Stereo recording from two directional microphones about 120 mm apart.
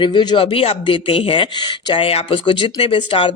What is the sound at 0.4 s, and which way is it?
Speech, 55° left (ahead or behind).